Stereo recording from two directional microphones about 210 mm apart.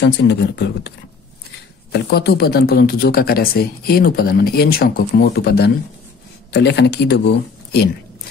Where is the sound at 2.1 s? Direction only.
50° left (ahead or behind).